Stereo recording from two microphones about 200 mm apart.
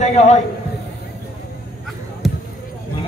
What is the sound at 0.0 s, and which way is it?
Speech, 35° left (ahead or behind).